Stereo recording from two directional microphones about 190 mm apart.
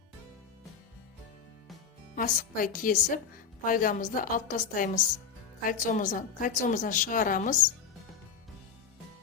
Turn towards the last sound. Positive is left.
turn(degrees=45)  # may be behind; listen again after turning